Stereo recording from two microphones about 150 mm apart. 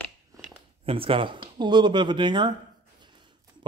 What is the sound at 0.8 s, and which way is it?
Speech, 35° right (ahead or behind).